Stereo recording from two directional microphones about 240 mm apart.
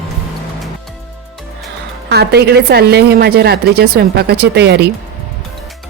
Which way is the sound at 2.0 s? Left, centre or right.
Right.